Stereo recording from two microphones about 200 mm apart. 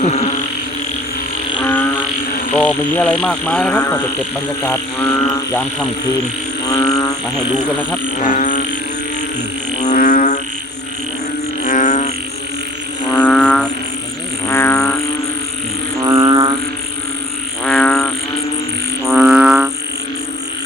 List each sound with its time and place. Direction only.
0.0 s music: 35° left (ahead or behind)
1.6 s a sound: 10° left (ahead or behind)
2.6 s speech: 5° left (ahead or behind)
7.3 s speech: 5° left (ahead or behind)
8.2 s speech: 40° left (ahead or behind)
9.8 s music: 35° left (ahead or behind)
11.6 s music: 40° left (ahead or behind)
13.1 s music: 5° left (ahead or behind)
14.4 s frog: 10° left (ahead or behind)
16.0 s didgeridoo: 20° right (ahead or behind)
17.6 s frog: 5° left (ahead or behind)
19.0 s frog: 5° right (ahead or behind)